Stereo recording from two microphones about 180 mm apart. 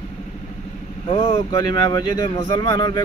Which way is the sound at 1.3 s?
25° left (ahead or behind).